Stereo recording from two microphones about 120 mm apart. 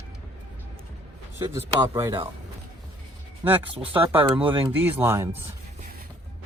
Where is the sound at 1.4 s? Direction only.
25° right (ahead or behind).